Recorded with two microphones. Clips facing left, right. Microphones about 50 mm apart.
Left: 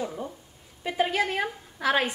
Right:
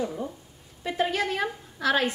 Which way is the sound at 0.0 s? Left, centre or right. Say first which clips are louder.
Right 2 dB; centre.